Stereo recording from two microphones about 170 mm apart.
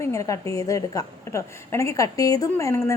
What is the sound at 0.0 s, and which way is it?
A woman's voice, 20° left (ahead or behind).